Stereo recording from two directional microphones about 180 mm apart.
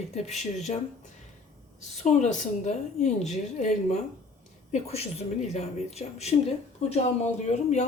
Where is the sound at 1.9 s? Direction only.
40° left (ahead or behind).